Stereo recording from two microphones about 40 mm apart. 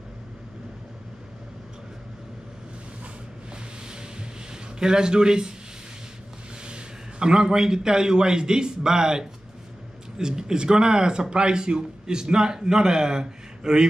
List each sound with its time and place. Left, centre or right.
4.7 s speech: centre
6.6 s a man's voice: right